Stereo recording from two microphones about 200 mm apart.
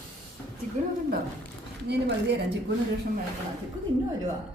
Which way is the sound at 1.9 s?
60° right (ahead or behind).